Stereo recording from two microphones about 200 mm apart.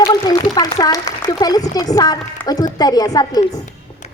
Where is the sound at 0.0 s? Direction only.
20° left (ahead or behind).